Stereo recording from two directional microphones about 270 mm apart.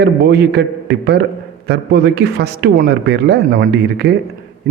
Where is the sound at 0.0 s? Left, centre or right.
Right.